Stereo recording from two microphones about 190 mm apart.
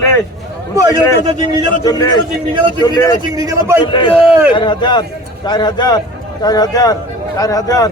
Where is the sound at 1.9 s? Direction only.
15° left (ahead or behind).